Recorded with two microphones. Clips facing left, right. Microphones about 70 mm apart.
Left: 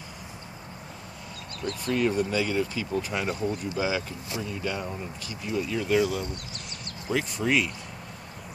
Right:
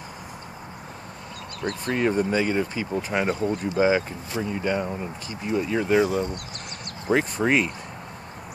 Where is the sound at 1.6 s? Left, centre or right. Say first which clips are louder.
Right 2 dB; right.